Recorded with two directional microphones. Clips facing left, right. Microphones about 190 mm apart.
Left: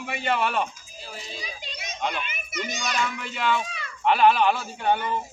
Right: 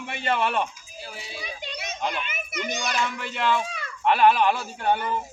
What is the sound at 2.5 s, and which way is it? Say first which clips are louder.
Speech: right 1 dB; 60° right (ahead or behind).